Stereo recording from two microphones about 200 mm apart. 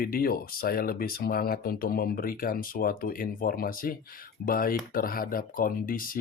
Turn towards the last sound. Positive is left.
turn(degrees=45)  # may be behind; listen again after turning